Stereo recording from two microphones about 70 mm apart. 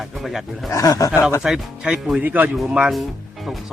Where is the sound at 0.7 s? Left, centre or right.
Left.